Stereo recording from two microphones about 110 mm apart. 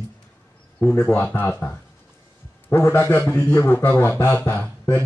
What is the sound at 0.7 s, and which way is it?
A man's voice, 15° left (ahead or behind).